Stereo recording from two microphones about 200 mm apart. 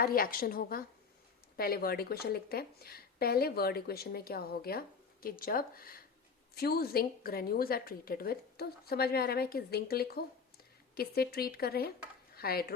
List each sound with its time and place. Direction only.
0.0 s a woman's voice: 45° left (ahead or behind)